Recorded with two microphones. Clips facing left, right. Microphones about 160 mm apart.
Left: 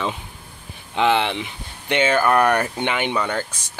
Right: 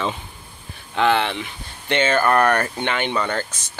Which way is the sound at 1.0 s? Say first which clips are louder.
Even; 20° left (ahead or behind).